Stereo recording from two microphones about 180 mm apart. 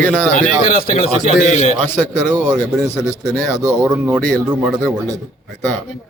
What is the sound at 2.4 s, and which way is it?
A man's voice, 20° right (ahead or behind).